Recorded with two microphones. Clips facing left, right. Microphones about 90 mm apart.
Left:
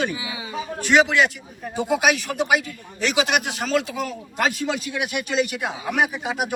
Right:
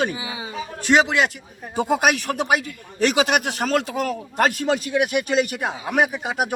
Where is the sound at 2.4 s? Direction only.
45° right (ahead or behind).